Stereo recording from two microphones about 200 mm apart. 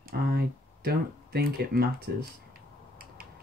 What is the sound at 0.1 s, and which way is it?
Speech, 50° right (ahead or behind).